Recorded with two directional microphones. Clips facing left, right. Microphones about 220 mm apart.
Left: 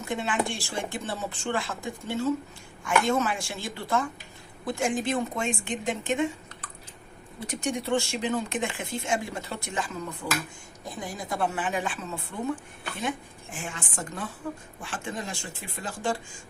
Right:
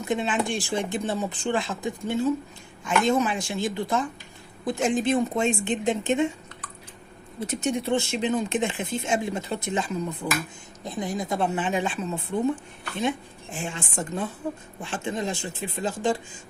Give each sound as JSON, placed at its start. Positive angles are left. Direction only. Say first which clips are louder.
{"t": 0.1, "sound": "speech", "louder": "right 3 dB", "side_deg": -20}
{"t": 7.4, "sound": "speech", "louder": "right 4 dB", "side_deg": -25}